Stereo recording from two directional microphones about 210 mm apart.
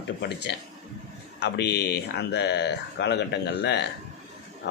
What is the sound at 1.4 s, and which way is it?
Speech, 55° left (ahead or behind).